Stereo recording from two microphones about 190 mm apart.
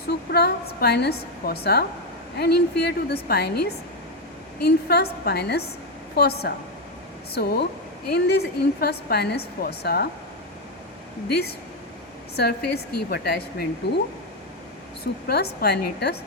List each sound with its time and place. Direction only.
0.1 s a woman's voice: 60° left (ahead or behind)
12.4 s a woman's voice: 55° left (ahead or behind)
15.3 s a woman's voice: 55° left (ahead or behind)